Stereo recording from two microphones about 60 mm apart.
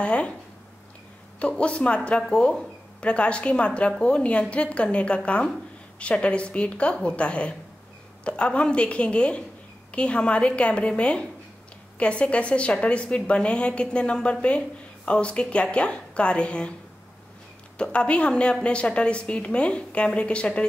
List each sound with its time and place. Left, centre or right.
0.0 s a woman's voice: centre
1.6 s a woman's voice: centre
17.7 s a woman's voice: centre